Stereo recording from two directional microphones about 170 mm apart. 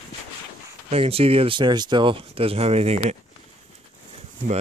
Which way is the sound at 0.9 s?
35° right (ahead or behind).